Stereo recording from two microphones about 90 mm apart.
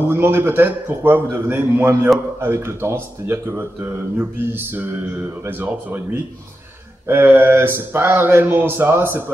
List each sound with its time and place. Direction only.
0.1 s speech: 25° right (ahead or behind)
7.1 s speech: 25° right (ahead or behind)